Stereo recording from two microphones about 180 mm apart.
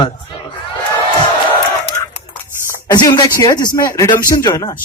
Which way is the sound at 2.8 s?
25° left (ahead or behind).